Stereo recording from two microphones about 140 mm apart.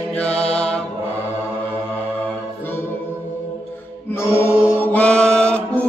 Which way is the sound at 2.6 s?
15° left (ahead or behind).